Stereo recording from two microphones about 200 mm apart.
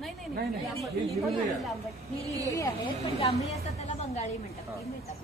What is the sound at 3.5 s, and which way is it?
Speech, 35° left (ahead or behind).